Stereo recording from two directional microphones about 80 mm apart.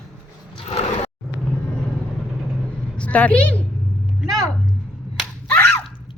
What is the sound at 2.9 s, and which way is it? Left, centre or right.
Speech, centre.